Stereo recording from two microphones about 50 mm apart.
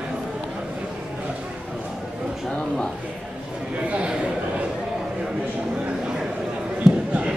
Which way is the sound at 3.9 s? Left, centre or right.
Right.